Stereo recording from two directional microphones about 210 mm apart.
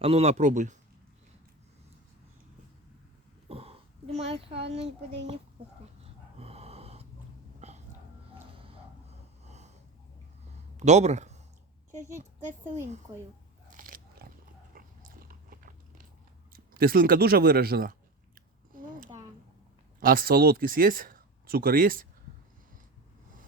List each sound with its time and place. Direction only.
0.0 s speech: 30° right (ahead or behind)
3.5 s a sound: 30° right (ahead or behind)
6.0 s wheeze: 30° right (ahead or behind)
7.6 s a sound: 30° right (ahead or behind)
10.8 s speech: 35° right (ahead or behind)
13.7 s biting: 40° right (ahead or behind)
16.5 s speech: 45° right (ahead or behind)
18.7 s a sound: 40° right (ahead or behind)
20.0 s speech: 40° right (ahead or behind)